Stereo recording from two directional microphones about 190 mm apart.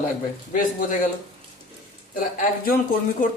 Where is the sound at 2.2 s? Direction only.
45° left (ahead or behind).